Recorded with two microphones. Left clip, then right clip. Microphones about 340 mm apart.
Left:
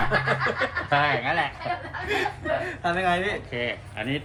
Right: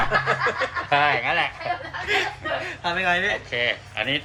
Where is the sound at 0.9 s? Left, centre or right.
Centre.